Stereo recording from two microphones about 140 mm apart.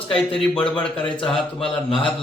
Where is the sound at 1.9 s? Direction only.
35° left (ahead or behind).